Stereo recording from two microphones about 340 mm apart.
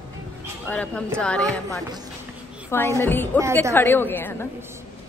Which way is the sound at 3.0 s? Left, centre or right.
Centre.